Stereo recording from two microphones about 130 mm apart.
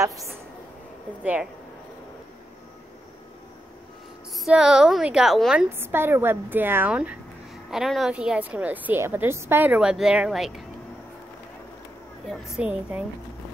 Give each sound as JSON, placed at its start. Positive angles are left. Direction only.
{"t": 0.0, "sound": "a woman's voice", "side_deg": -25}
{"t": 1.2, "sound": "a woman's voice", "side_deg": -10}
{"t": 4.5, "sound": "a woman's voice", "side_deg": -5}
{"t": 5.8, "sound": "a woman's voice", "side_deg": -15}
{"t": 12.3, "sound": "a woman's voice", "side_deg": -5}